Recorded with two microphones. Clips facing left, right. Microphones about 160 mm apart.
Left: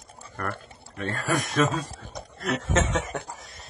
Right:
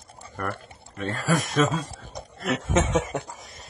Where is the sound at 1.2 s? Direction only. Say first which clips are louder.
Right 1 dB; centre (ahead or behind).